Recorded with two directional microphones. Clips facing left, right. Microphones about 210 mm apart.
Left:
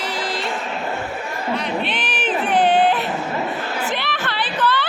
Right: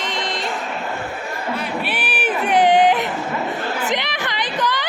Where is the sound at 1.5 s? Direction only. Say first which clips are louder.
Left 2 dB; 5° right (ahead or behind).